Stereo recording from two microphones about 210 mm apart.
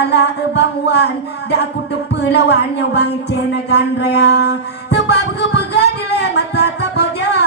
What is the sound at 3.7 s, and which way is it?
Music, 50° left (ahead or behind).